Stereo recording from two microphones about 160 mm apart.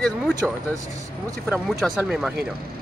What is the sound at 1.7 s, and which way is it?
Speech, centre (ahead or behind).